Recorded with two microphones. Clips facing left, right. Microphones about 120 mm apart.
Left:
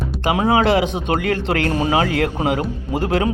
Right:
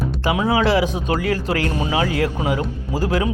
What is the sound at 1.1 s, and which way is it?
Speech, 60° left (ahead or behind).